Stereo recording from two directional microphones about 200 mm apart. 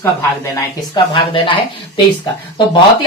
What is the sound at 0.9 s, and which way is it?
Speech, 25° left (ahead or behind).